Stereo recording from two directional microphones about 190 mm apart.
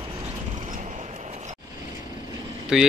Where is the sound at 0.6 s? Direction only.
40° right (ahead or behind).